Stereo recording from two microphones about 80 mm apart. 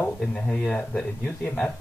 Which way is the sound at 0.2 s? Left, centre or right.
Centre.